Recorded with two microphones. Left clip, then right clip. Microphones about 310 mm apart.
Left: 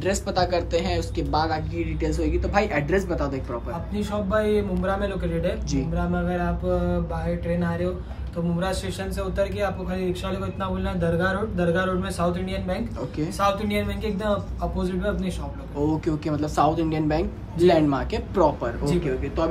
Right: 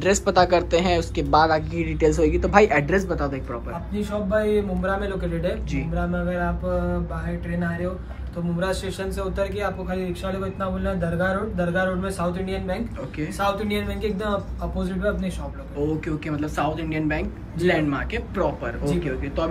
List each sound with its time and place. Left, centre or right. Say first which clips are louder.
0.0 s a man's voice: right 5 dB; centre
8.5 s a man's voice: right 3 dB; centre